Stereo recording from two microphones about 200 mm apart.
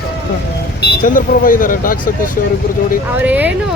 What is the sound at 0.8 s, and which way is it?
Speech, 40° left (ahead or behind).